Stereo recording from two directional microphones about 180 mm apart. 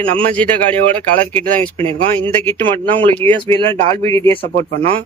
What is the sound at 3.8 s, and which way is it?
Speech, 35° right (ahead or behind).